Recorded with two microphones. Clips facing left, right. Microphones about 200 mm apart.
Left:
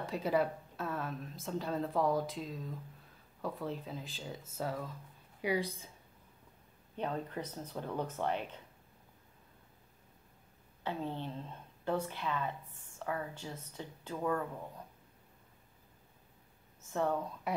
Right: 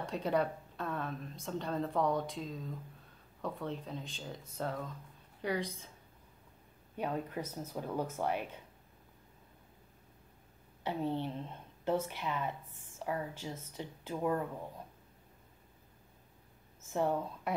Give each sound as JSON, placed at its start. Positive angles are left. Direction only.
{"t": 0.0, "sound": "a woman's voice", "side_deg": 5}
{"t": 7.0, "sound": "a woman's voice", "side_deg": -10}
{"t": 10.8, "sound": "a woman's voice", "side_deg": -15}
{"t": 16.9, "sound": "a woman's voice", "side_deg": -15}
{"t": 17.5, "sound": "speech", "side_deg": 0}